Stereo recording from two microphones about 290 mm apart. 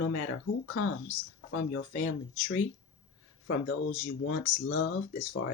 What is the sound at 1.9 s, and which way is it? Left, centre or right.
Speech, left.